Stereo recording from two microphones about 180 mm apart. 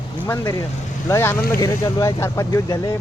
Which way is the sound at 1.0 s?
15° left (ahead or behind).